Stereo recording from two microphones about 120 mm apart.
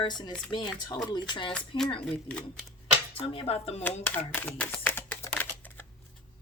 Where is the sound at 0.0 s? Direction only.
35° left (ahead or behind).